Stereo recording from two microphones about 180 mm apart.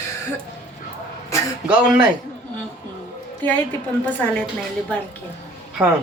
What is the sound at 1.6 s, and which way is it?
Speech, 5° right (ahead or behind).